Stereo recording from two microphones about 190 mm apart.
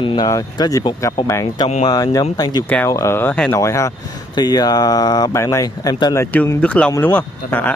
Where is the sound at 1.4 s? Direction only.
30° left (ahead or behind).